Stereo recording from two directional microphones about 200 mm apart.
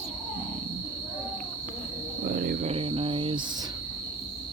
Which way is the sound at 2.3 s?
45° right (ahead or behind).